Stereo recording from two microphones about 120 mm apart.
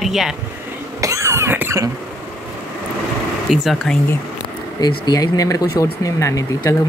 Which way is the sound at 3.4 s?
Centre (ahead or behind).